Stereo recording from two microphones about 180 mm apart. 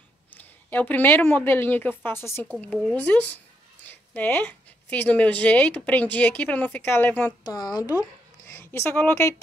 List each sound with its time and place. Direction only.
0.3 s a woman's voice: 10° left (ahead or behind)
7.4 s a woman's voice: 20° left (ahead or behind)